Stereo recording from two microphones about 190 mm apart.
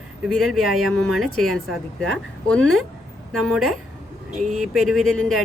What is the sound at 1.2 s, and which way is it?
Speech, centre (ahead or behind).